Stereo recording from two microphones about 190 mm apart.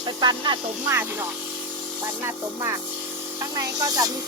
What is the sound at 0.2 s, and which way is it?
Speech, 25° right (ahead or behind).